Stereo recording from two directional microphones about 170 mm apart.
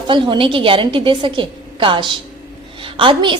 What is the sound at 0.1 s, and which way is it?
A woman's voice, 30° right (ahead or behind).